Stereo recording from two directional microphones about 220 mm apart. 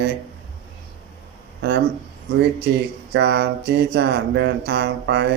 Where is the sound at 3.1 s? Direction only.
50° right (ahead or behind).